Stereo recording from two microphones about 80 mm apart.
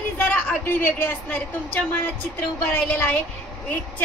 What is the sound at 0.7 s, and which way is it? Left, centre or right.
A woman's voice, left.